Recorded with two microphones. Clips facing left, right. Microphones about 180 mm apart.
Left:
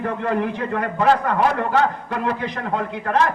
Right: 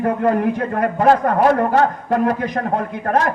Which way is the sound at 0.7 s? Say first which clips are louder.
Right 3 dB; 40° right (ahead or behind).